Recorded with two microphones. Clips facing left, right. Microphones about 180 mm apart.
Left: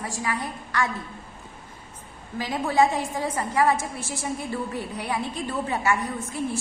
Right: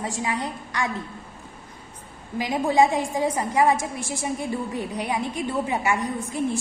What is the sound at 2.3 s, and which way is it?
A woman's voice, 15° right (ahead or behind).